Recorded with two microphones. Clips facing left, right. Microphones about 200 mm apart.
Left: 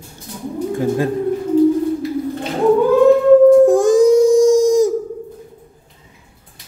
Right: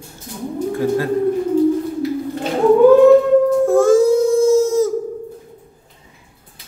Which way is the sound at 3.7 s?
15° left (ahead or behind).